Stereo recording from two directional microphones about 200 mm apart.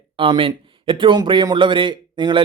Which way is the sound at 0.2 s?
25° right (ahead or behind).